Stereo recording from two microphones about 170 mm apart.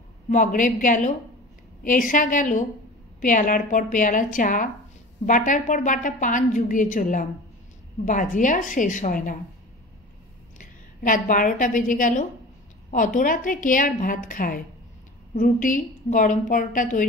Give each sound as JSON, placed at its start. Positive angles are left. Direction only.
{"t": 0.3, "sound": "a woman's voice", "side_deg": 50}
{"t": 10.6, "sound": "a woman's voice", "side_deg": 50}